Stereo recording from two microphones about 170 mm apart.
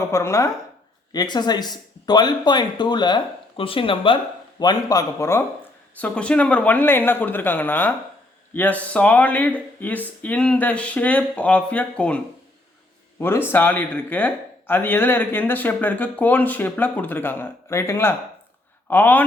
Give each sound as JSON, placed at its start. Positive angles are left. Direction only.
{"t": 0.1, "sound": "speech", "side_deg": 15}
{"t": 6.0, "sound": "speech", "side_deg": 5}